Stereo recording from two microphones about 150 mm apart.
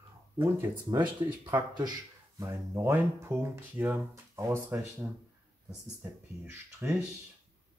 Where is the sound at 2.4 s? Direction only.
20° right (ahead or behind).